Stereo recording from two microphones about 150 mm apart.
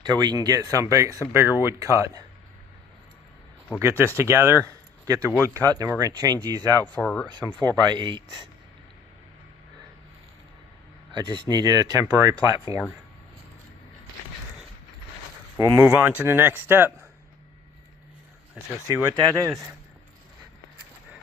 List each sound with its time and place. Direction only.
0.0 s speech: 30° right (ahead or behind)
3.8 s speech: 15° right (ahead or behind)
5.3 s speech: 15° left (ahead or behind)
5.6 s speech: 25° right (ahead or behind)
6.8 s speech: 10° left (ahead or behind)
7.3 s speech: 30° right (ahead or behind)
11.1 s speech: 30° right (ahead or behind)
15.5 s speech: 20° right (ahead or behind)
18.9 s speech: 20° right (ahead or behind)